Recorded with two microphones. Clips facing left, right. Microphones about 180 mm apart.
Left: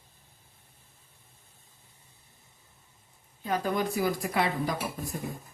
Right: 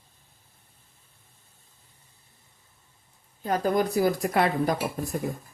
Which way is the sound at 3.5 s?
40° right (ahead or behind).